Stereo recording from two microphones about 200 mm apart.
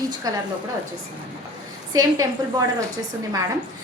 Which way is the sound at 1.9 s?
20° right (ahead or behind).